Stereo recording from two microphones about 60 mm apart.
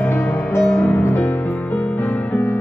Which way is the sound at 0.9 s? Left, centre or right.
Left.